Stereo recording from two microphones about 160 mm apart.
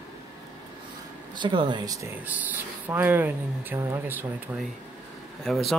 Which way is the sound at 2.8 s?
10° right (ahead or behind).